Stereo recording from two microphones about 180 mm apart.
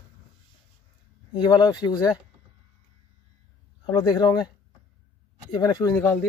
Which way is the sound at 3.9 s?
25° left (ahead or behind).